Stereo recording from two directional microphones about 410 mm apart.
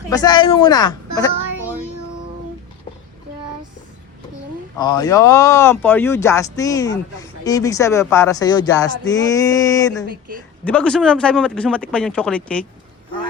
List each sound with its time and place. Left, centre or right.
0.1 s speech: centre
4.8 s speech: centre
10.1 s a woman's voice: right
10.6 s speech: centre